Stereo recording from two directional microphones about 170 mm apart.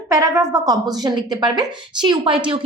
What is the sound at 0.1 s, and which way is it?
A woman's voice, 20° right (ahead or behind).